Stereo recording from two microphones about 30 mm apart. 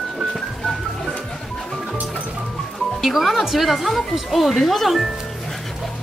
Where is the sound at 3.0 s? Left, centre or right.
Centre.